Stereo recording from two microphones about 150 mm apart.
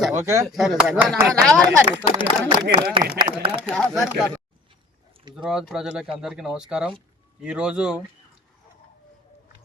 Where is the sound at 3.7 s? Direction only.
5° left (ahead or behind).